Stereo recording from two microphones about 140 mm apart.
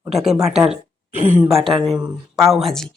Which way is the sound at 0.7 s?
60° right (ahead or behind).